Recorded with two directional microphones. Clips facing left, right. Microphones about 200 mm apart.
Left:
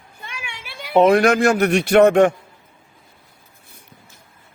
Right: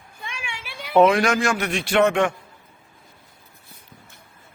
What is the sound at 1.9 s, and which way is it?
Speech, 40° left (ahead or behind).